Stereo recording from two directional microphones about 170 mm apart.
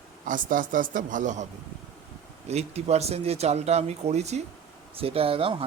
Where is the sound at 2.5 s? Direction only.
40° right (ahead or behind).